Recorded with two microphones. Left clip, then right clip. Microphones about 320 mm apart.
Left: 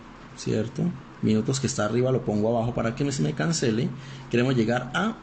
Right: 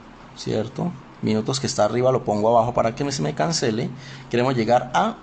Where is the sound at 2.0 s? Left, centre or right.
Right.